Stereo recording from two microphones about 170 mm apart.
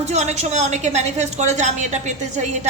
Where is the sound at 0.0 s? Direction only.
40° right (ahead or behind).